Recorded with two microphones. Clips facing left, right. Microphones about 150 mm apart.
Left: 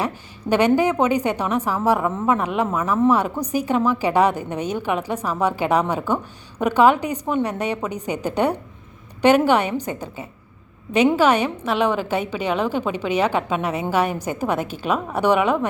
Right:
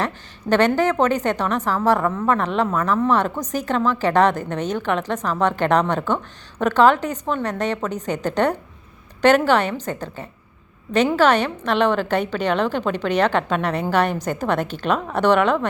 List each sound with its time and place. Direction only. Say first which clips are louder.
0.0 s a woman's voice: even; 10° left (ahead or behind)